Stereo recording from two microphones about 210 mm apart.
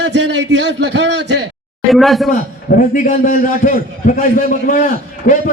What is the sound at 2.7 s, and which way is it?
A man's voice, 40° left (ahead or behind).